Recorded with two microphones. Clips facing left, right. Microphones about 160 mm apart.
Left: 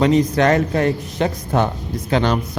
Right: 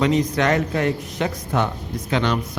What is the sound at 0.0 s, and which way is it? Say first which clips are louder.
A man's voice: left 4 dB; 35° left (ahead or behind).